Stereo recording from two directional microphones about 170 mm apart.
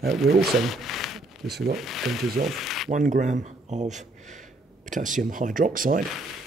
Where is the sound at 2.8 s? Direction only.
50° right (ahead or behind).